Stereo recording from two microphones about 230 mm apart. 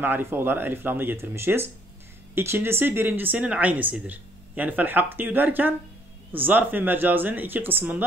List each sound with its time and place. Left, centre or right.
0.0 s speech: centre